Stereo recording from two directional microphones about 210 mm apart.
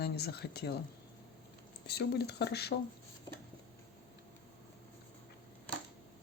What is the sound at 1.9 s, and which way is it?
Speech, 50° left (ahead or behind).